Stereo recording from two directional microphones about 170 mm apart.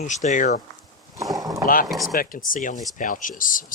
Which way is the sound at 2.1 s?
55° left (ahead or behind).